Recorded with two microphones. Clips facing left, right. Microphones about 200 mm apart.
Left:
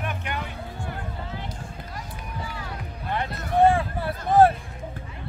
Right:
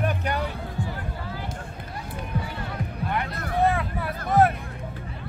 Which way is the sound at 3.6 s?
30° left (ahead or behind).